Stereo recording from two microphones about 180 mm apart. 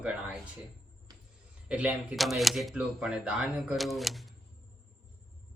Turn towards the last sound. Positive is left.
turn(degrees=0)  # may be behind; listen again after turning